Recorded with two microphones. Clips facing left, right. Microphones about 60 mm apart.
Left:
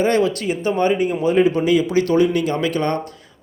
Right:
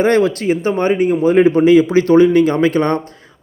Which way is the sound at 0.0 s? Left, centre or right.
Right.